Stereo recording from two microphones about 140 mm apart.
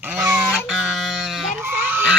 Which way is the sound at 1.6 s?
15° right (ahead or behind).